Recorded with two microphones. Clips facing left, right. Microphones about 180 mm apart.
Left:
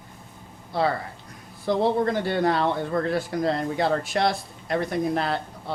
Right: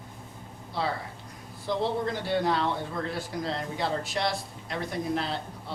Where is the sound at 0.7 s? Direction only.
55° left (ahead or behind).